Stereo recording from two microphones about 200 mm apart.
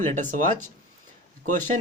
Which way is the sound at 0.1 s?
40° right (ahead or behind).